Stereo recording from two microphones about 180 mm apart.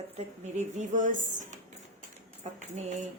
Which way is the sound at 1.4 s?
40° right (ahead or behind).